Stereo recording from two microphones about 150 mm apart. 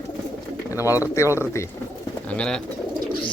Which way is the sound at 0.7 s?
20° left (ahead or behind).